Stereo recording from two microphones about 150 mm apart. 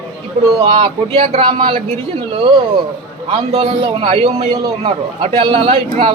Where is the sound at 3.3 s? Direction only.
35° right (ahead or behind).